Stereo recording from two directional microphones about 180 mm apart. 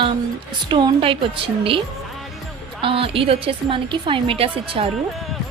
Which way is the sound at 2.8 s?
30° right (ahead or behind).